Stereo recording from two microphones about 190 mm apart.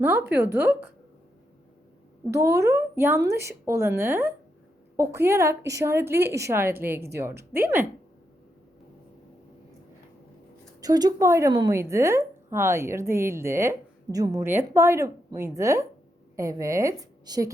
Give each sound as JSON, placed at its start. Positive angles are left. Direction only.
{"t": 0.0, "sound": "a woman's voice", "side_deg": -10}
{"t": 2.3, "sound": "a woman's voice", "side_deg": -15}
{"t": 10.8, "sound": "a woman's voice", "side_deg": -20}